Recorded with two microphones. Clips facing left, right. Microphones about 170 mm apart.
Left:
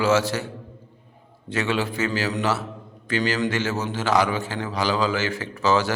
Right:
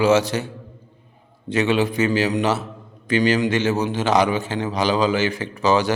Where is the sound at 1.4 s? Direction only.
20° right (ahead or behind).